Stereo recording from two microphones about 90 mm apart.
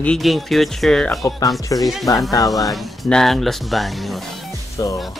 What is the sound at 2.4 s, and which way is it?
Speech, centre (ahead or behind).